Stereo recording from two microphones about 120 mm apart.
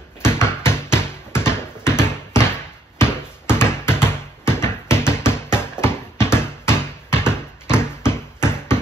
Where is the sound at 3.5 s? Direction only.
20° left (ahead or behind).